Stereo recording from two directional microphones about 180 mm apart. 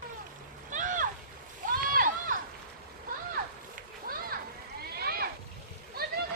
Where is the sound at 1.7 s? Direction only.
50° right (ahead or behind).